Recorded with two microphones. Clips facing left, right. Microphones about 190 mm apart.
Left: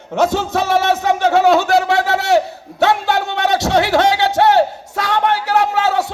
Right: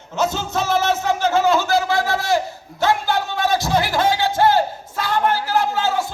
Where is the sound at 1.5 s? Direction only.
65° left (ahead or behind).